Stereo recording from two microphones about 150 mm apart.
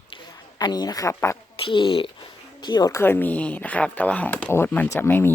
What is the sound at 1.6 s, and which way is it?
Speech, 35° left (ahead or behind).